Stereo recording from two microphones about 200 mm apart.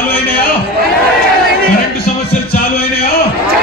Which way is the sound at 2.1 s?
40° left (ahead or behind).